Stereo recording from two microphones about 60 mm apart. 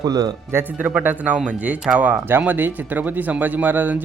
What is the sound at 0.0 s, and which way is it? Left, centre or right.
Speech, right.